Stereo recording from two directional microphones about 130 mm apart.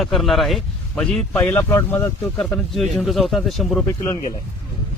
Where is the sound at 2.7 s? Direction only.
Centre (ahead or behind).